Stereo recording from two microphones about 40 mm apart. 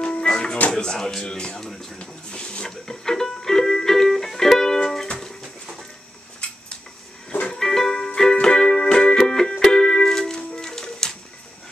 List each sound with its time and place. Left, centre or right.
0.0 s music: left
0.7 s speech: centre
0.9 s speech: centre
1.2 s speech: left
1.6 s speech: centre
2.0 s a sound: left
2.9 s music: centre
6.4 s dishes: left
7.5 s music: centre